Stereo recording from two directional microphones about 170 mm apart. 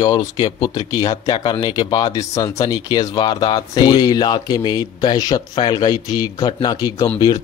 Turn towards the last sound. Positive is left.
turn(degrees=25)  # may be behind; listen again after turning